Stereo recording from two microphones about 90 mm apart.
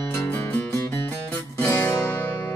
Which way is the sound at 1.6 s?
30° left (ahead or behind).